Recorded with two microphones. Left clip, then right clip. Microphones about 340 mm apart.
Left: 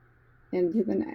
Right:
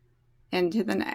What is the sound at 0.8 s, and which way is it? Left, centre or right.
Speech, right.